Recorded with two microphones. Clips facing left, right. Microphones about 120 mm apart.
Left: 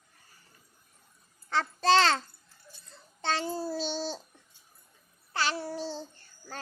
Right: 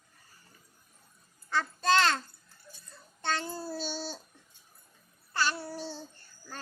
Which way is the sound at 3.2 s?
25° left (ahead or behind).